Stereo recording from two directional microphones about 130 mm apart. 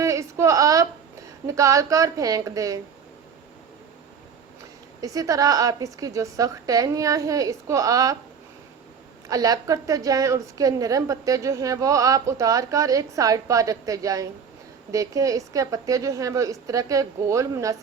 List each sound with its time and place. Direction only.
0.0 s a sound: 25° right (ahead or behind)
1.5 s a woman's voice: 25° right (ahead or behind)
4.9 s a woman's voice: 25° right (ahead or behind)
9.3 s a woman's voice: 30° right (ahead or behind)